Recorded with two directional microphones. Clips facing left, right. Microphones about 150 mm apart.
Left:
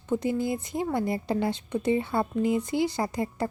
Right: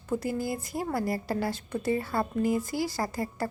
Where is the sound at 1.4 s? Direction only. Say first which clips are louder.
Left 3 dB; 20° left (ahead or behind).